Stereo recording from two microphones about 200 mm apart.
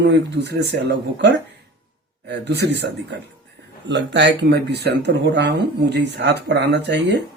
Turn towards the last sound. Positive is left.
turn(degrees=-60)  # may be behind; listen again after turning